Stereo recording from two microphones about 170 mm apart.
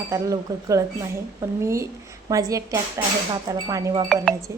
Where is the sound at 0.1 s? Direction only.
20° right (ahead or behind).